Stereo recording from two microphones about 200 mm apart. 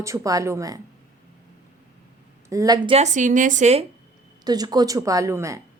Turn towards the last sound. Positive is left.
turn(degrees=-15)  # may be behind; listen again after turning